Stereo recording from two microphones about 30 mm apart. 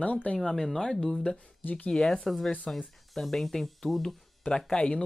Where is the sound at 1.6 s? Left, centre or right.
Left.